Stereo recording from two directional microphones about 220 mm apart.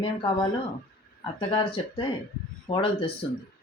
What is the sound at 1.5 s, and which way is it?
Speech, 25° left (ahead or behind).